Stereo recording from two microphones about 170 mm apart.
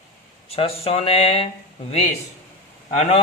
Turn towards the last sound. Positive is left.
turn(degrees=40)  # may be behind; listen again after turning